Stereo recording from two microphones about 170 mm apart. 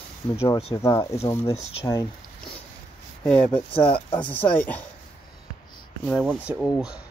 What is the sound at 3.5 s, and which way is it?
Speech, 30° left (ahead or behind).